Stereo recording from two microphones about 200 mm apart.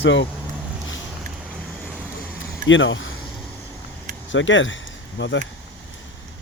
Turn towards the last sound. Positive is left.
turn(degrees=65)  # may be behind; listen again after turning